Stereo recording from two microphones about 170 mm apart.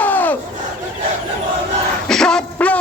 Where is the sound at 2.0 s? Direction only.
5° left (ahead or behind).